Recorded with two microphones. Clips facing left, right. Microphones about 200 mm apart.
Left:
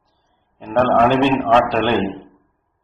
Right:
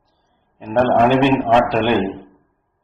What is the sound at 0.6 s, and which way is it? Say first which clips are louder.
A man's voice: even; 15° right (ahead or behind).